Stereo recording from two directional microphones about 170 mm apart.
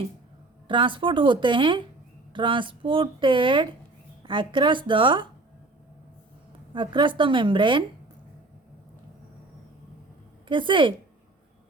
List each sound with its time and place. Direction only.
0.7 s a woman's voice: 30° right (ahead or behind)
6.7 s a woman's voice: 30° right (ahead or behind)
10.5 s a woman's voice: 30° right (ahead or behind)